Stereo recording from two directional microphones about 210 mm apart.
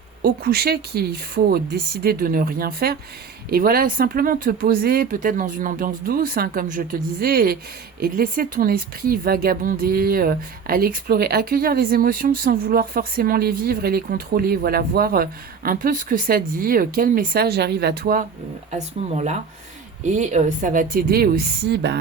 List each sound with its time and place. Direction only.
0.2 s speech: 45° right (ahead or behind)
18.7 s speech: 35° right (ahead or behind); by 21.9 s 55° right (ahead or behind)